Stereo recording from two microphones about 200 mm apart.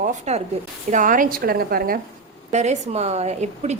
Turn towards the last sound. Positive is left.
turn(degrees=-35)  # may be behind; listen again after turning